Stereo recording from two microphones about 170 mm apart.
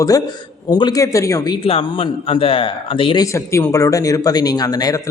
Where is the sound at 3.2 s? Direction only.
15° left (ahead or behind).